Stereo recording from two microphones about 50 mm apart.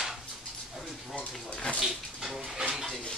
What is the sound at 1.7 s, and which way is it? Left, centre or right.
Dog, centre.